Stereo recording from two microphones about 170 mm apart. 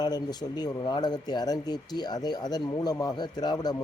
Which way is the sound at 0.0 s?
25° left (ahead or behind).